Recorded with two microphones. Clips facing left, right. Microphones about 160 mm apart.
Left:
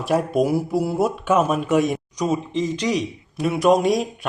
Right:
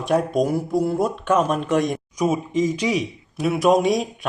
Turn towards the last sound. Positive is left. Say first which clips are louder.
# even
turn(degrees=0)  # may be behind; listen again after turning